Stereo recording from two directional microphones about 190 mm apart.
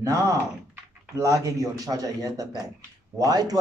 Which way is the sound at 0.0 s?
15° right (ahead or behind).